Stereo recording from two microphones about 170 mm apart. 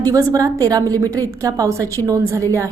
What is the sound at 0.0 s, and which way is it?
A woman's voice, 20° right (ahead or behind).